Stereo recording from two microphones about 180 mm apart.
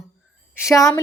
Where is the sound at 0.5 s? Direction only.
15° left (ahead or behind).